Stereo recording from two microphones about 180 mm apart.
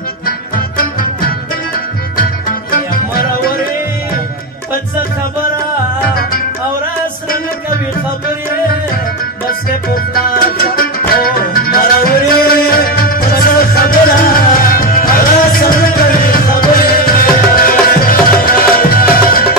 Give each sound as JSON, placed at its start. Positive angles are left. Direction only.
{"t": 2.1, "sound": "music", "side_deg": 50}
{"t": 10.6, "sound": "music", "side_deg": 55}